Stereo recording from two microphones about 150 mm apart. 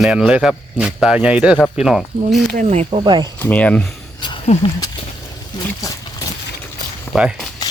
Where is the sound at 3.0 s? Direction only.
30° right (ahead or behind).